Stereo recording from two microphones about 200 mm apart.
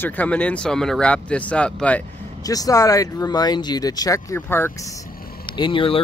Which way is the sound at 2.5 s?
15° left (ahead or behind).